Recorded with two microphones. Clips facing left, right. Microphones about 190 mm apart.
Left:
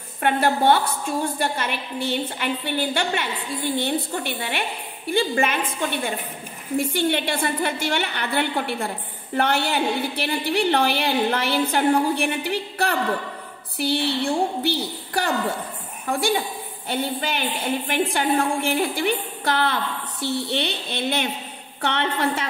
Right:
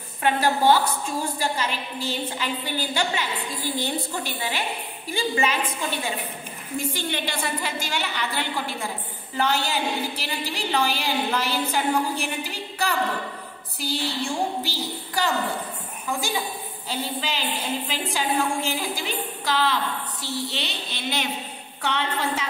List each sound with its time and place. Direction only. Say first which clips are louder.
0.2 s a woman's voice: left 1 dB; 60° left (ahead or behind)
16.8 s a woman's voice: left 4 dB; 60° left (ahead or behind)